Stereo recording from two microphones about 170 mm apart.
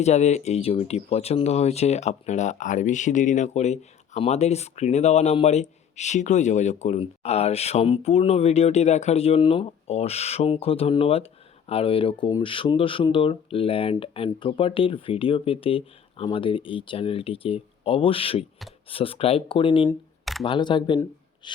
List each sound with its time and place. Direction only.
0.0 s speech: 40° left (ahead or behind)